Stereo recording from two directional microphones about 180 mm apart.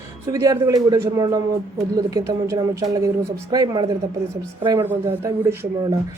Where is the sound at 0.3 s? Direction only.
20° right (ahead or behind).